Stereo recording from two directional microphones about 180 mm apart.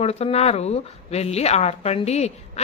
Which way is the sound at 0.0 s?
35° left (ahead or behind).